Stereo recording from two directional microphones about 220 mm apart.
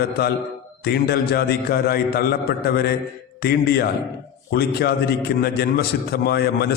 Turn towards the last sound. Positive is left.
turn(degrees=45)  # may be behind; listen again after turning